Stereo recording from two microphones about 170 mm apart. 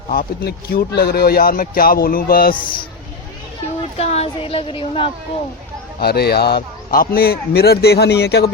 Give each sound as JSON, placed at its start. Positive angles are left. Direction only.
{"t": 0.1, "sound": "speech", "side_deg": 60}
{"t": 2.6, "sound": "speech", "side_deg": 30}
{"t": 3.9, "sound": "a woman's voice", "side_deg": 40}
{"t": 6.0, "sound": "a man's voice", "side_deg": 70}